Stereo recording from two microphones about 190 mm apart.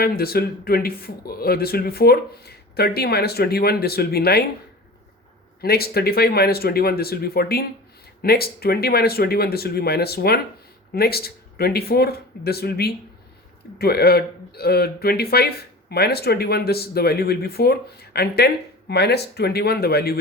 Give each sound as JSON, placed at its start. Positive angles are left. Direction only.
{"t": 0.0, "sound": "speech", "side_deg": 55}
{"t": 5.6, "sound": "speech", "side_deg": 55}